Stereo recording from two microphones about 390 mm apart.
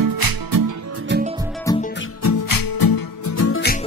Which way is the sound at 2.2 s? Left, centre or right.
Left.